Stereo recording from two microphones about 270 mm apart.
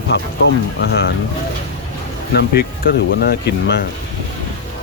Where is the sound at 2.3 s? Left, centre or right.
Left.